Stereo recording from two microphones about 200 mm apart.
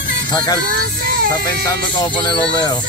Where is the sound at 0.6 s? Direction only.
50° right (ahead or behind).